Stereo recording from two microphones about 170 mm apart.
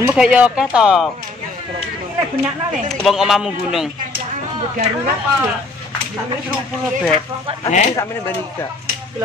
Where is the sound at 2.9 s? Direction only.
Centre (ahead or behind).